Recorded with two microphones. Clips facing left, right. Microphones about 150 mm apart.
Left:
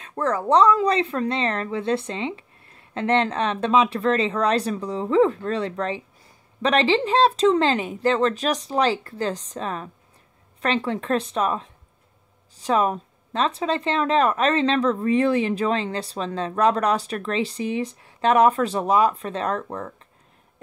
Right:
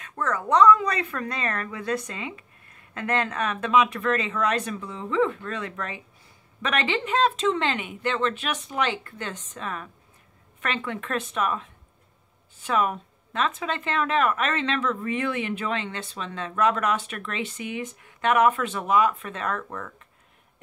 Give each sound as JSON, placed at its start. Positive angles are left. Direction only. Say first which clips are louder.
{"t": 0.0, "sound": "speech", "louder": "left 5 dB", "side_deg": 30}